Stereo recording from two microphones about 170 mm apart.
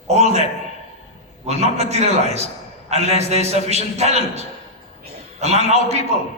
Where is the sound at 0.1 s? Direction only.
40° right (ahead or behind).